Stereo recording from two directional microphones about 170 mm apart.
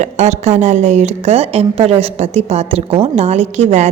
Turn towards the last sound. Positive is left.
turn(degrees=-40)  # may be behind; listen again after turning